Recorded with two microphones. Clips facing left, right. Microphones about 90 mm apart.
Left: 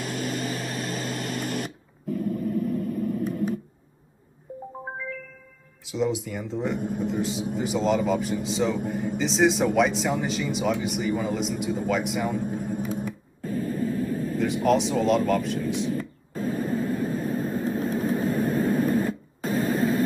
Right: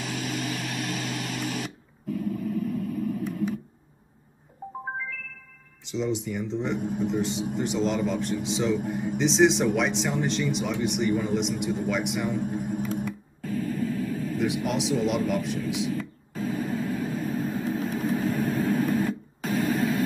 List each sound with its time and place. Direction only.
0.0 s a sound: 40° left (ahead or behind)
5.9 s speech: 5° left (ahead or behind)
6.8 s a man's voice: 50° left (ahead or behind)
7.1 s speech: centre (ahead or behind)
13.0 s a sound: 40° left (ahead or behind)
14.4 s speech: centre (ahead or behind)
15.9 s vehicle: 40° left (ahead or behind)